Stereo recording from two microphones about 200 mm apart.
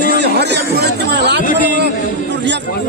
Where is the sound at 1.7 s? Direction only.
60° right (ahead or behind).